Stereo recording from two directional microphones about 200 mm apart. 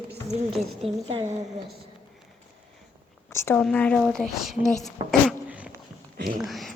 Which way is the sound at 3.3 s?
10° left (ahead or behind).